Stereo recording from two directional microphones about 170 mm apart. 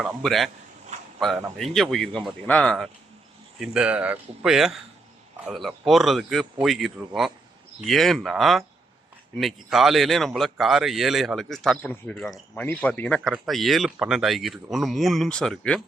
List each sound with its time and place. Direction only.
0.0 s speech: centre (ahead or behind)
0.9 s a sound: 45° right (ahead or behind)
1.5 s speech: centre (ahead or behind)
3.6 s speech: 5° right (ahead or behind)